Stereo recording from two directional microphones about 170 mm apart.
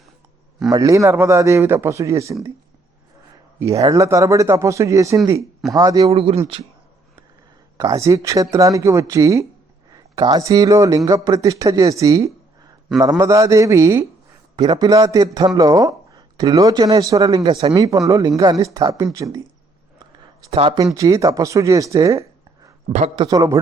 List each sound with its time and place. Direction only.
0.7 s speech: 20° right (ahead or behind)
3.6 s a man's voice: 20° right (ahead or behind)
6.1 s speech: 35° right (ahead or behind)
7.8 s a man's voice: 20° right (ahead or behind)
17.4 s speech: 30° right (ahead or behind)
17.7 s a man's voice: 20° right (ahead or behind)
20.5 s a man's voice: 30° right (ahead or behind)
22.9 s speech: 40° right (ahead or behind)
23.1 s a man's voice: 25° right (ahead or behind)